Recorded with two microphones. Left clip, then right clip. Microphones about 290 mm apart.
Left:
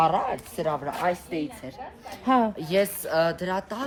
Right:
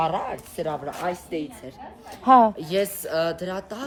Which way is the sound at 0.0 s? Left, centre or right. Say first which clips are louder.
Left 2 dB; centre.